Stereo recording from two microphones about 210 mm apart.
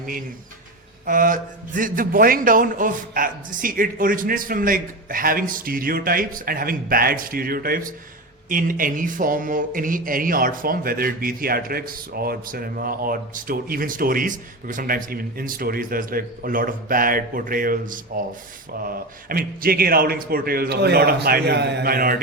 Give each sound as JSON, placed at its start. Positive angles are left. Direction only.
{"t": 1.0, "sound": "a man's voice", "side_deg": -40}